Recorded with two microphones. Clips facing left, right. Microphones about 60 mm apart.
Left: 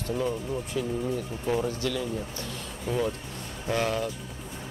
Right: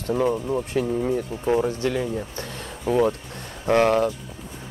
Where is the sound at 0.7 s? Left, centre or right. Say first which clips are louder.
Right 6 dB; right.